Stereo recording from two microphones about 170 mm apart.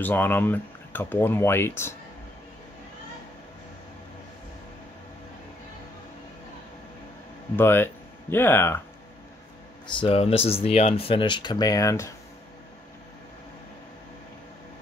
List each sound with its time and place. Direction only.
0.0 s speech: 10° left (ahead or behind)
7.5 s speech: 15° left (ahead or behind)
9.8 s speech: 30° left (ahead or behind)